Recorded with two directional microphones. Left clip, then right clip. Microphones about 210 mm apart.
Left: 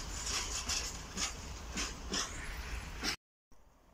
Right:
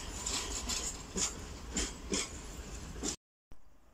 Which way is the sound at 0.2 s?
20° right (ahead or behind).